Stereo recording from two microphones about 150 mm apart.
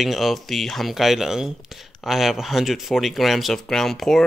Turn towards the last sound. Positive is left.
turn(degrees=0)  # may be behind; listen again after turning